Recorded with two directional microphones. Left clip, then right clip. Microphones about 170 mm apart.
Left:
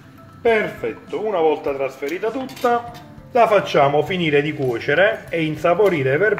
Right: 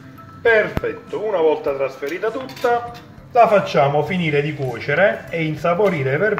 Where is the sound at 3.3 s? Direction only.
55° left (ahead or behind).